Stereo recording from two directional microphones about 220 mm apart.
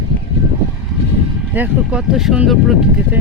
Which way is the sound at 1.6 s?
5° right (ahead or behind).